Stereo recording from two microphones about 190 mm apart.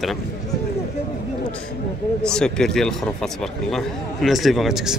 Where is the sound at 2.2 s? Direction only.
5° left (ahead or behind).